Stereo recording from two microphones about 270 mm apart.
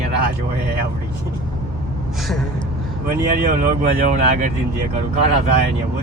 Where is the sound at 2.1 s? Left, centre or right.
Centre.